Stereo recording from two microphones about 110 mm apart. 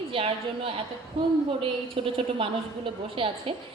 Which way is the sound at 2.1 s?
55° right (ahead or behind).